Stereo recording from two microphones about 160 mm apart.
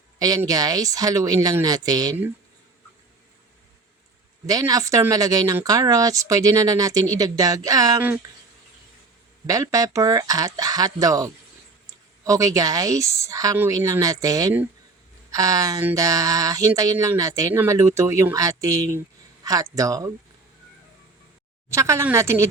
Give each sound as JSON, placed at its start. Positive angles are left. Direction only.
{"t": 0.2, "sound": "speech", "side_deg": -25}
{"t": 4.4, "sound": "speech", "side_deg": -20}
{"t": 9.5, "sound": "speech", "side_deg": -20}
{"t": 21.7, "sound": "speech", "side_deg": -20}